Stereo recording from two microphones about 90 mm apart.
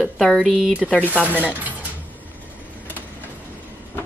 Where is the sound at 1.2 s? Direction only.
15° right (ahead or behind).